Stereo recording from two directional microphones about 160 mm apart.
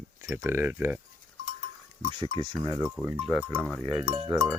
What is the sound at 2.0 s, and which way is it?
Speech, 40° right (ahead or behind).